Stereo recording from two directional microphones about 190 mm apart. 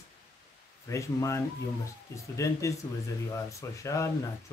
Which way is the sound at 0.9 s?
15° left (ahead or behind).